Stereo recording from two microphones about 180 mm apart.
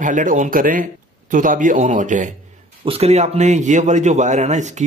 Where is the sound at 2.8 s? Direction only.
35° right (ahead or behind).